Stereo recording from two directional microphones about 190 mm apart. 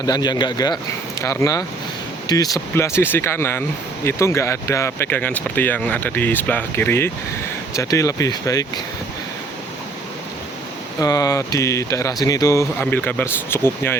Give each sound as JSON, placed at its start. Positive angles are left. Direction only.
{"t": 0.0, "sound": "a man's voice", "side_deg": 20}
{"t": 11.0, "sound": "speech", "side_deg": 20}